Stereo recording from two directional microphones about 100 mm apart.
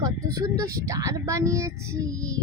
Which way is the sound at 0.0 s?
35° right (ahead or behind).